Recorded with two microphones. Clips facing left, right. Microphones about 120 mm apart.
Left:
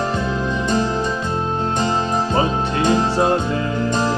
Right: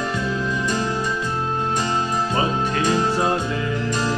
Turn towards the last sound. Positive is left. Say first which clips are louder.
# left 3 dB
turn(degrees=30)  # may be behind; listen again after turning